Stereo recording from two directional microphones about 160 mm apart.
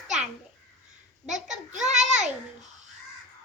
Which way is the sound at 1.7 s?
45° right (ahead or behind).